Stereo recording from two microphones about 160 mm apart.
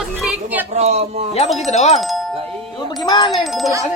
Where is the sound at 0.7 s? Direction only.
40° right (ahead or behind).